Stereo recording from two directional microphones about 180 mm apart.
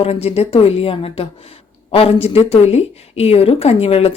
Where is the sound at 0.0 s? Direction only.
35° left (ahead or behind).